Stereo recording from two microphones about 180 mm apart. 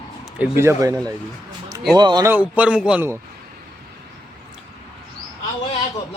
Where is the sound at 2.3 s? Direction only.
10° right (ahead or behind).